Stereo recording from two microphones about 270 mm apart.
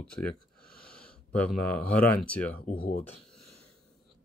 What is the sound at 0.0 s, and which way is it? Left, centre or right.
Speech, centre.